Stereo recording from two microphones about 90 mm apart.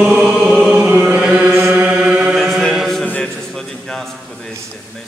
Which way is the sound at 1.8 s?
10° right (ahead or behind).